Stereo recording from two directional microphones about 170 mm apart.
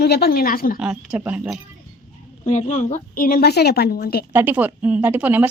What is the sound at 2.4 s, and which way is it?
A woman's voice, 45° left (ahead or behind).